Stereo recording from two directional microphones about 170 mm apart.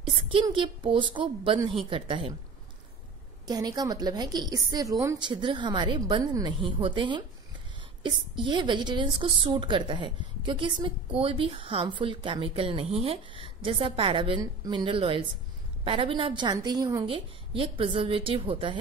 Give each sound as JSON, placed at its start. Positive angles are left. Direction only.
{"t": 0.3, "sound": "a woman's voice", "side_deg": -30}
{"t": 3.4, "sound": "a woman's voice", "side_deg": -25}